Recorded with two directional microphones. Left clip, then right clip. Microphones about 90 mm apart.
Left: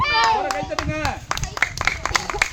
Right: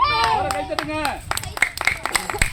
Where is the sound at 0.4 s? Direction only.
30° left (ahead or behind).